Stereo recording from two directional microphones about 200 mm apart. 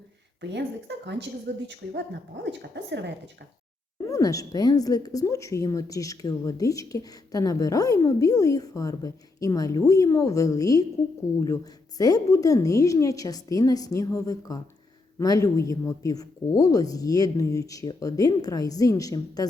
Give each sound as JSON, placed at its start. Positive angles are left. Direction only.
{"t": 0.4, "sound": "a woman's voice", "side_deg": -60}
{"t": 4.1, "sound": "a woman's voice", "side_deg": 15}